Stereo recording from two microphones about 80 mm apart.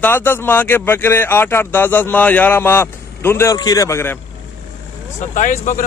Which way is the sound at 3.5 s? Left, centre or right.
Left.